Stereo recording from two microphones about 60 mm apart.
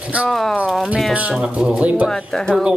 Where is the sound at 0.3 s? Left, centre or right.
Centre.